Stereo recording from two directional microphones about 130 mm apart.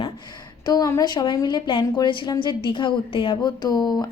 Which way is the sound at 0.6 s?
30° left (ahead or behind).